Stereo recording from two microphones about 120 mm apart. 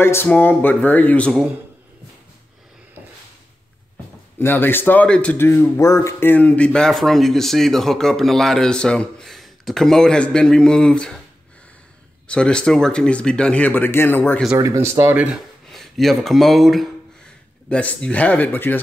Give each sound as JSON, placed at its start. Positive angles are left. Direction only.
{"t": 0.0, "sound": "speech", "side_deg": 20}
{"t": 4.4, "sound": "speech", "side_deg": 15}
{"t": 12.3, "sound": "speech", "side_deg": 10}
{"t": 14.5, "sound": "speech", "side_deg": -25}
{"t": 15.7, "sound": "speech", "side_deg": 0}